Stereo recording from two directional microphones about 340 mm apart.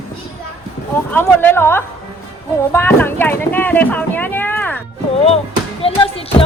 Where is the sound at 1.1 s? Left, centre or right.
Centre.